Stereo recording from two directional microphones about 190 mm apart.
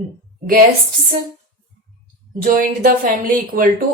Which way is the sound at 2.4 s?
45° right (ahead or behind).